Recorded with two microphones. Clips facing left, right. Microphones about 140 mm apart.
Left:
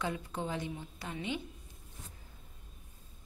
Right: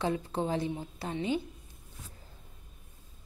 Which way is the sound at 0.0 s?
30° right (ahead or behind).